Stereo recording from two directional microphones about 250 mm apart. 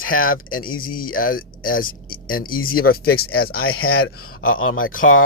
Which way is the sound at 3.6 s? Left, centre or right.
Left.